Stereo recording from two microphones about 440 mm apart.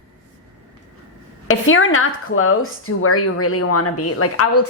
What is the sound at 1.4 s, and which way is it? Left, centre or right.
A woman's voice, left.